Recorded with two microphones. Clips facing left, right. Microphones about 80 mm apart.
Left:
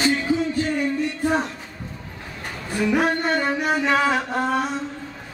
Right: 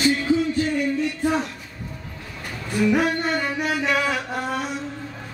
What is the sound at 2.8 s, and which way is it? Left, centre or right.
Music, left.